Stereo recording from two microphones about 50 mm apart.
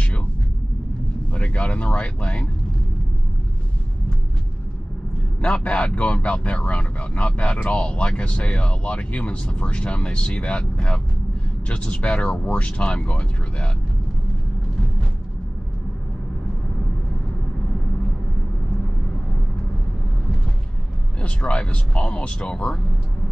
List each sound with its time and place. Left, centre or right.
1.3 s speech: left
5.4 s speech: left
21.2 s speech: left